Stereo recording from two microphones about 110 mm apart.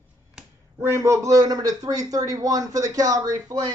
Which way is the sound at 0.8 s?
25° right (ahead or behind).